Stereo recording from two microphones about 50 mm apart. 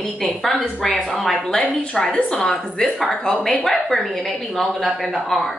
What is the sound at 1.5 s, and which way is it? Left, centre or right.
A woman's voice, centre.